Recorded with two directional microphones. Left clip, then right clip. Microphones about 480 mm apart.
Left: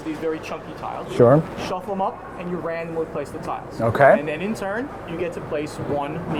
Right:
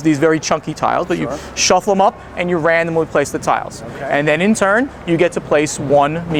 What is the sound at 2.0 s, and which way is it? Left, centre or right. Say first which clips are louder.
Speech: right 11 dB; right.